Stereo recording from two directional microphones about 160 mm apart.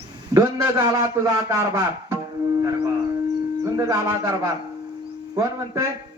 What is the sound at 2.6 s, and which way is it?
Music, 20° right (ahead or behind).